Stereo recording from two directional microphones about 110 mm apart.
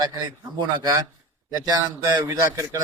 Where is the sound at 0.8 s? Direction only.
30° right (ahead or behind).